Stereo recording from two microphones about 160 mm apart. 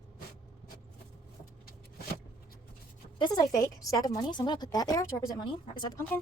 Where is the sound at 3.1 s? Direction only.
25° left (ahead or behind).